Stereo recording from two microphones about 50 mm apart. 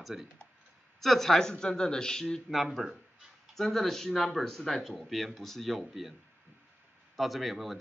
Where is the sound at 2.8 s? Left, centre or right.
Centre.